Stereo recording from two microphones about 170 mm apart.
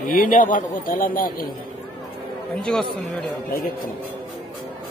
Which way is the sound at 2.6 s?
5° left (ahead or behind).